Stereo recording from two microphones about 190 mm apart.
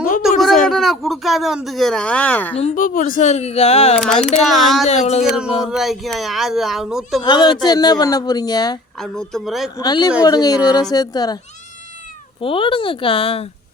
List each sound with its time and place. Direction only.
0.2 s a sound: centre (ahead or behind)
0.7 s speech: centre (ahead or behind)
2.6 s speech: 40° left (ahead or behind)
3.9 s speech: 5° left (ahead or behind)
4.9 s speech: 35° left (ahead or behind)
5.6 s speech: centre (ahead or behind)
7.3 s speech: 25° left (ahead or behind)
9.0 s speech: centre (ahead or behind)
9.7 s speech: 20° left (ahead or behind)
12.4 s speech: 25° left (ahead or behind)